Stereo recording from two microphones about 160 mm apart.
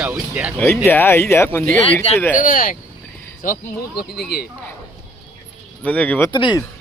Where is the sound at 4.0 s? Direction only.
85° left.